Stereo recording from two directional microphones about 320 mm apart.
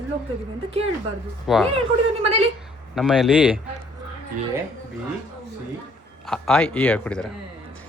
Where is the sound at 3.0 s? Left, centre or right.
Centre.